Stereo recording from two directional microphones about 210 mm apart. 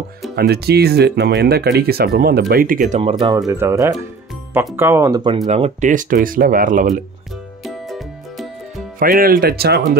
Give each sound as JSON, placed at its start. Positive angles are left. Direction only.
{"t": 0.4, "sound": "speech", "side_deg": -50}
{"t": 3.0, "sound": "speech", "side_deg": -25}
{"t": 3.3, "sound": "speech", "side_deg": -15}
{"t": 5.5, "sound": "speech", "side_deg": -35}
{"t": 7.6, "sound": "music", "side_deg": 0}
{"t": 9.0, "sound": "speech", "side_deg": -45}